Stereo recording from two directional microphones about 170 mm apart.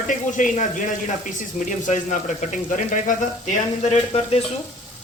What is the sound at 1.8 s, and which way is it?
Speech, 45° left (ahead or behind).